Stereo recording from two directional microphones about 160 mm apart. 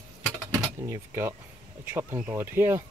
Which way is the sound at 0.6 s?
15° right (ahead or behind).